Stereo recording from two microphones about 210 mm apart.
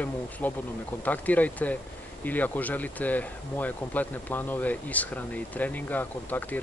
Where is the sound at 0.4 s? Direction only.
10° left (ahead or behind).